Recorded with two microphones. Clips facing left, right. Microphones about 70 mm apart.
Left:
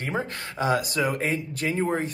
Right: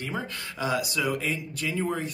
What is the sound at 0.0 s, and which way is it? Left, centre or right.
Speech, left.